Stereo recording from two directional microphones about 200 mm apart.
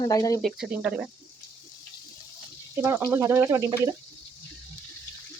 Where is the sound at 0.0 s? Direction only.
20° left (ahead or behind).